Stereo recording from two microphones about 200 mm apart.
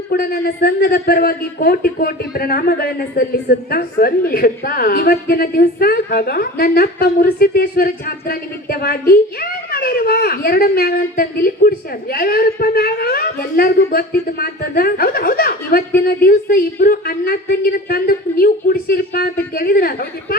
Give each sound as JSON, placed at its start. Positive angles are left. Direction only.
{"t": 0.1, "sound": "a woman's voice", "side_deg": 50}